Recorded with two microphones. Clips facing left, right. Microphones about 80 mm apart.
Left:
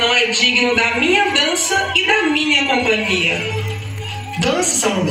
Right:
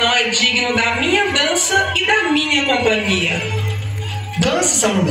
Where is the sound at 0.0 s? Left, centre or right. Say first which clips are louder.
Even; right.